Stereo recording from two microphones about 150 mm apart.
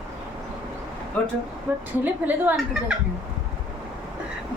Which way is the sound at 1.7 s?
15° right (ahead or behind).